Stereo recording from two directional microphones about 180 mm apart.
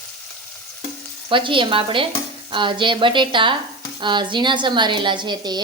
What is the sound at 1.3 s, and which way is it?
A woman's voice, 30° right (ahead or behind).